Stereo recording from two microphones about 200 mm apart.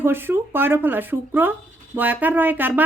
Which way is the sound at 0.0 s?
10° right (ahead or behind).